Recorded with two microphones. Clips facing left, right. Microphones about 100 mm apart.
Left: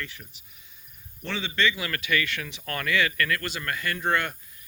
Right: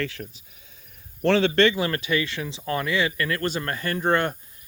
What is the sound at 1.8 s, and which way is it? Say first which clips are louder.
Speech: right 4 dB; 35° right (ahead or behind).